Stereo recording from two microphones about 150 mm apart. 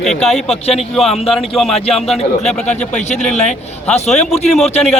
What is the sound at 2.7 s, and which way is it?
Speech, 50° left (ahead or behind).